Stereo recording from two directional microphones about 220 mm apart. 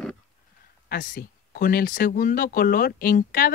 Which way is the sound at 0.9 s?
40° left (ahead or behind).